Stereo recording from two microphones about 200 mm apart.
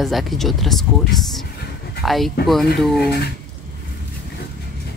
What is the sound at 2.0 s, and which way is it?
Speech, centre (ahead or behind).